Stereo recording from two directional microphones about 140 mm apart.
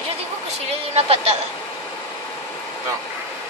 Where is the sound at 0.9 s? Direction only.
50° right (ahead or behind).